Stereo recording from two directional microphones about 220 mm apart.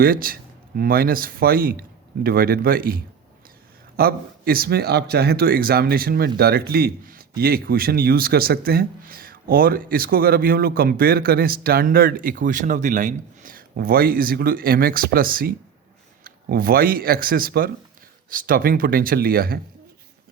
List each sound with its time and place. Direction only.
0.0 s speech: 40° right (ahead or behind)